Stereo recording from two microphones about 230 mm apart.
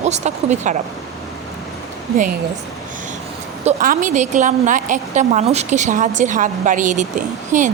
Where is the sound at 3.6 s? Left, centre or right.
Right.